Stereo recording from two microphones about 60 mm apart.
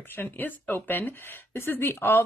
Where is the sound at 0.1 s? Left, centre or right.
Left.